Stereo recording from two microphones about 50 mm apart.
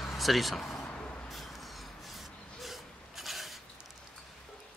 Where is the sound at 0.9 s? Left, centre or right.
Left.